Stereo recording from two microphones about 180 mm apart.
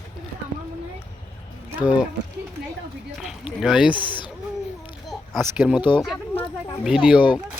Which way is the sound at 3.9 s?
25° left (ahead or behind).